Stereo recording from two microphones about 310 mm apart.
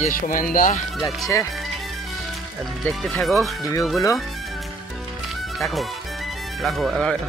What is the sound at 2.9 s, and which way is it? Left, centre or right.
Speech, centre.